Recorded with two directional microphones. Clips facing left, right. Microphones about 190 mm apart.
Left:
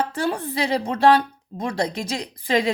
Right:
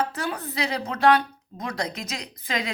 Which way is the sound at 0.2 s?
30° left (ahead or behind).